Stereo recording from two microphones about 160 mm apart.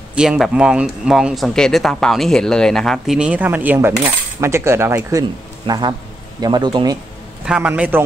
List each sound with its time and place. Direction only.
0.1 s speech: 5° right (ahead or behind)
5.7 s speech: 25° right (ahead or behind)
7.4 s a man's voice: 5° right (ahead or behind)